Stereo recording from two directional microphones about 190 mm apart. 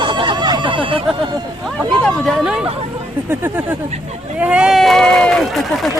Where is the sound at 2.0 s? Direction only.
Centre (ahead or behind).